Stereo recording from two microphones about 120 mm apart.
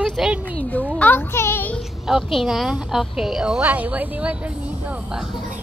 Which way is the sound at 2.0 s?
Centre (ahead or behind).